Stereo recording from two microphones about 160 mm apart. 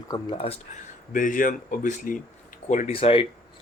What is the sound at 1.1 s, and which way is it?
Speech, 55° left (ahead or behind).